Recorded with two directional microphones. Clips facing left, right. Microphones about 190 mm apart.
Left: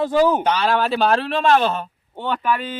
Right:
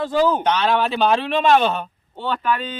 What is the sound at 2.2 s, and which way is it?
Speech, 15° left (ahead or behind).